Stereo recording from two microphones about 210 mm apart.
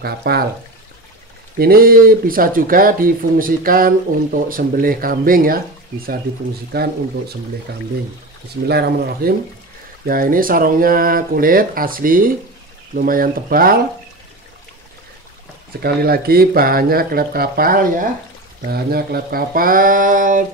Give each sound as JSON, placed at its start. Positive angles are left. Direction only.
{"t": 0.0, "sound": "speech", "side_deg": -50}
{"t": 1.6, "sound": "speech", "side_deg": -45}
{"t": 6.7, "sound": "speech", "side_deg": -50}
{"t": 15.8, "sound": "speech", "side_deg": -45}